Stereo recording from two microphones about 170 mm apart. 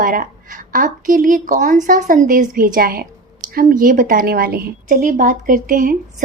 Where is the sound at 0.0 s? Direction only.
55° right (ahead or behind).